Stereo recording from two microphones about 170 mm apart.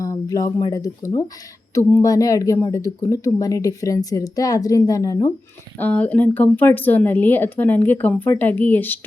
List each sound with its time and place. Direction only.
0.0 s a woman's voice: 20° left (ahead or behind)